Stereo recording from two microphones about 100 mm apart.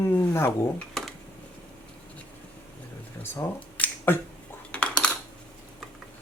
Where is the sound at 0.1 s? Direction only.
20° left (ahead or behind).